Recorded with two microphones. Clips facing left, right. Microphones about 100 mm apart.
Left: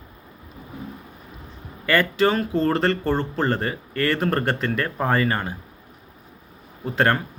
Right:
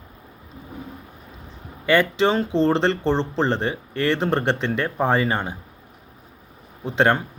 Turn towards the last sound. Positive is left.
turn(degrees=-20)  # may be behind; listen again after turning